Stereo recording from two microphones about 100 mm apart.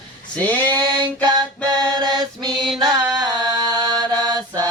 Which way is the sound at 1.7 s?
45° right (ahead or behind).